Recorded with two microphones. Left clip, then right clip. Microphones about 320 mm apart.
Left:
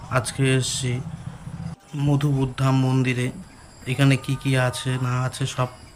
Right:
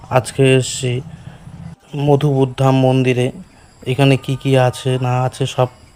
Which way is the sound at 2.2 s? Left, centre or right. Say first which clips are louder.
Right 10 dB; centre.